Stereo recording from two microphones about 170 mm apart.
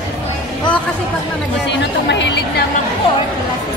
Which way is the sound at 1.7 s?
90° left.